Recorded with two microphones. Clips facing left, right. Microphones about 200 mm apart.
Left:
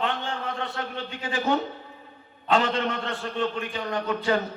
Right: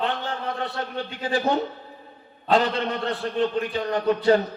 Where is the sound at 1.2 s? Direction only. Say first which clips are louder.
Right 2 dB; 35° right (ahead or behind).